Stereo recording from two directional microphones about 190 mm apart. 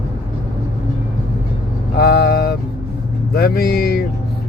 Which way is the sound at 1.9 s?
55° left (ahead or behind).